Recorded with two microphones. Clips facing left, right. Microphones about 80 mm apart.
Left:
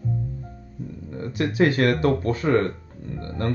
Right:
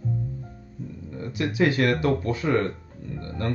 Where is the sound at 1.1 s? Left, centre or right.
Left.